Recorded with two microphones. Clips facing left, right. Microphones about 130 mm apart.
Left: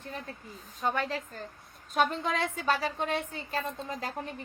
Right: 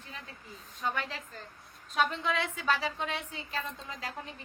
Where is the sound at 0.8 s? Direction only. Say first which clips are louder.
Left 4 dB; 40° left (ahead or behind).